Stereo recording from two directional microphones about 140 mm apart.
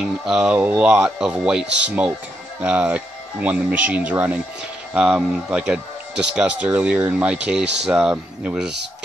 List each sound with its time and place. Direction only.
0.0 s speech: 5° right (ahead or behind)